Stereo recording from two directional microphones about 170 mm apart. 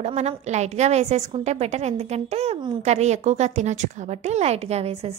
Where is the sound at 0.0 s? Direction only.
40° right (ahead or behind).